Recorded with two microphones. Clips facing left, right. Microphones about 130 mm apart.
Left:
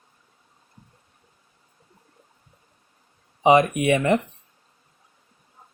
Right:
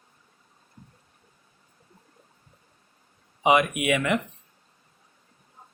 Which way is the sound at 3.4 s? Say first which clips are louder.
Left 5 dB; 35° left (ahead or behind).